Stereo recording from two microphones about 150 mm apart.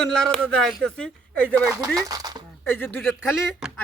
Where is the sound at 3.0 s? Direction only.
Centre (ahead or behind).